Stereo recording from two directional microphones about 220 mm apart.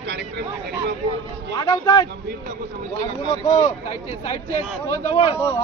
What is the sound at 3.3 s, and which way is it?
Speech, 15° left (ahead or behind).